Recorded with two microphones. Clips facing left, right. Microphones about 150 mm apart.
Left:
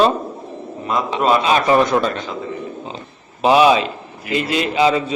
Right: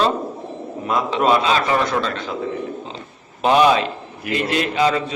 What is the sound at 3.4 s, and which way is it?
A man's voice, 5° left (ahead or behind).